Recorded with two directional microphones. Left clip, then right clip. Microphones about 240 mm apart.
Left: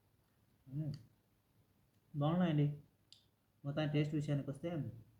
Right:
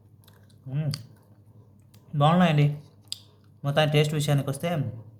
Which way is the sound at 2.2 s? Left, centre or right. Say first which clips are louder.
Right 16 dB; right.